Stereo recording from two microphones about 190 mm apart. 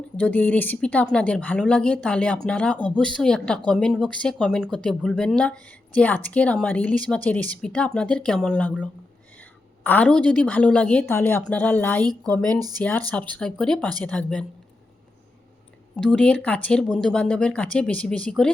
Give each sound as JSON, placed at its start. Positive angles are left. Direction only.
{"t": 0.2, "sound": "a woman's voice", "side_deg": 10}
{"t": 12.5, "sound": "speech", "side_deg": -20}
{"t": 13.3, "sound": "speech", "side_deg": 5}
{"t": 16.0, "sound": "speech", "side_deg": 5}